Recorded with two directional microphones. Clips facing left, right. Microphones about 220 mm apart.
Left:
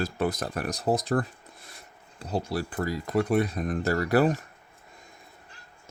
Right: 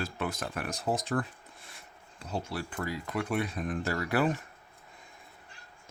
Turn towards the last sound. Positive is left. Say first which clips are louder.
# left 6 dB
turn(degrees=40)  # may be behind; listen again after turning